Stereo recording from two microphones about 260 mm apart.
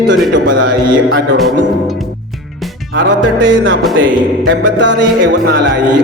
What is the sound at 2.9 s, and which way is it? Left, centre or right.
A man's voice, right.